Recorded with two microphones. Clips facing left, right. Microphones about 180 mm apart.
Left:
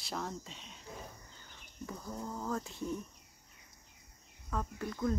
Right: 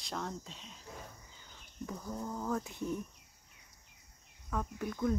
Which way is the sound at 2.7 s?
15° right (ahead or behind).